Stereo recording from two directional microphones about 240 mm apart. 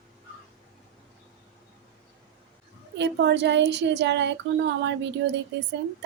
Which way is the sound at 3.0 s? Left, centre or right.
Right.